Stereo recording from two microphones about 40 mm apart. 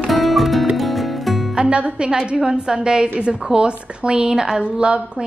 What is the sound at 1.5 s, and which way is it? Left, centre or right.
A woman's voice, right.